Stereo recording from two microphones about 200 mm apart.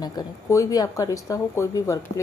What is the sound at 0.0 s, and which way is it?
A woman's voice, 20° left (ahead or behind).